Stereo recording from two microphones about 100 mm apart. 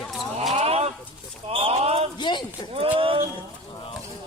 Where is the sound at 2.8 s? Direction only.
65° right (ahead or behind).